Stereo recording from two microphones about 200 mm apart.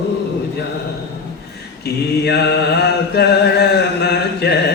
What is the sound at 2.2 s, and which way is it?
Mantra, 55° left (ahead or behind).